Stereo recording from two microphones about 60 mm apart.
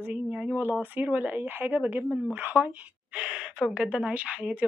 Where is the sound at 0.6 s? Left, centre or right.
Right.